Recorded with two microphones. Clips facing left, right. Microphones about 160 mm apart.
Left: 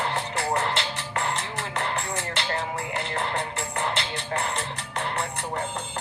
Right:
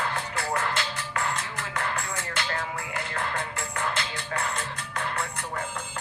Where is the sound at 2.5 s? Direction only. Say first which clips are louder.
Left 3 dB; 25° left (ahead or behind).